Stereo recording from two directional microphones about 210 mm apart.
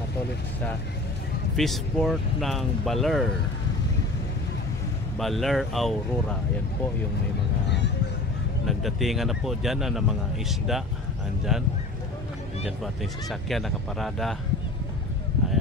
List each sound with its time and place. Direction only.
1.6 s speech: centre (ahead or behind)
5.2 s speech: centre (ahead or behind)
7.6 s music: 55° left (ahead or behind)
8.6 s speech: centre (ahead or behind)